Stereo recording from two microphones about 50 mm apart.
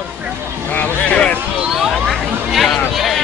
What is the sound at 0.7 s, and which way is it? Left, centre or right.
Speech, left.